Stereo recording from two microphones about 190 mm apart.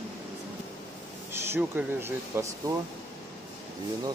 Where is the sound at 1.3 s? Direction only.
10° right (ahead or behind).